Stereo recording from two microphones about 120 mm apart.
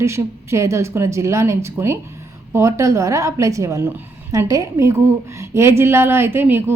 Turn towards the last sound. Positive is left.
turn(degrees=-15)  # may be behind; listen again after turning